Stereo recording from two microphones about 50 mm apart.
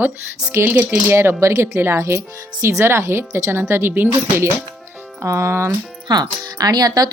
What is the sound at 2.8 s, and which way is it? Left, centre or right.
A woman's voice, right.